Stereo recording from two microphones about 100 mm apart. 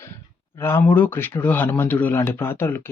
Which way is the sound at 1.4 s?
20° left (ahead or behind).